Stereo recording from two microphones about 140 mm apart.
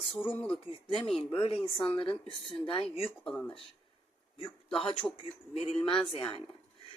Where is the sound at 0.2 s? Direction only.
10° left (ahead or behind).